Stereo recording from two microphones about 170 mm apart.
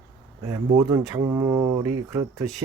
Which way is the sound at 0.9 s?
20° right (ahead or behind).